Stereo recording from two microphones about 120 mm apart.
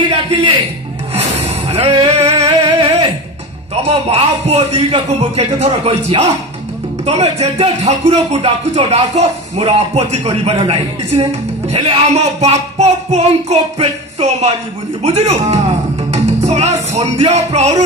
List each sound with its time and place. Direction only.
0.0 s music: 45° right (ahead or behind)
2.1 s music: 60° right (ahead or behind)
3.8 s speech: 60° right (ahead or behind)
10.5 s speech: 50° right (ahead or behind)
16.1 s music: 70° right (ahead or behind)